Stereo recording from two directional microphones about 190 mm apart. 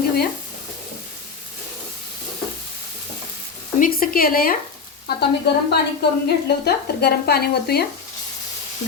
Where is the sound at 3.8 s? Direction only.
50° left (ahead or behind).